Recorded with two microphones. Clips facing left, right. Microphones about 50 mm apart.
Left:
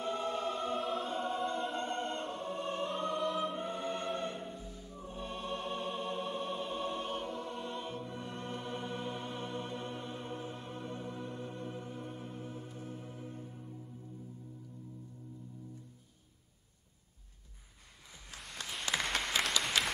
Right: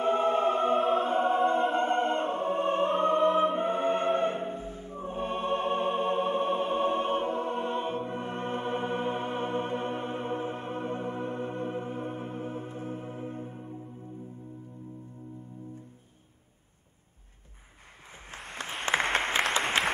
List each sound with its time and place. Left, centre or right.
0.0 s choir: right
18.3 s applause: right